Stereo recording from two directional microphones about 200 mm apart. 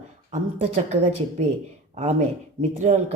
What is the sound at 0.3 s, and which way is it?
Speech, 35° right (ahead or behind).